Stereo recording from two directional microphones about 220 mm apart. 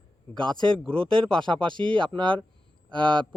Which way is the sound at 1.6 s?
20° right (ahead or behind).